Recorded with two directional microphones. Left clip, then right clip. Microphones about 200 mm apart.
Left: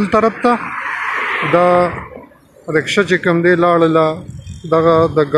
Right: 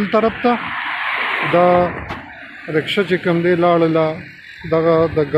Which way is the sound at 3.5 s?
15° left (ahead or behind).